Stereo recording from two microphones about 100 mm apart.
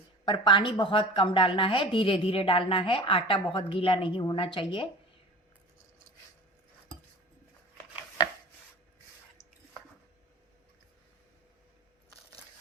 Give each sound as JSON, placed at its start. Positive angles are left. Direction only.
{"t": 0.3, "sound": "a woman's voice", "side_deg": 50}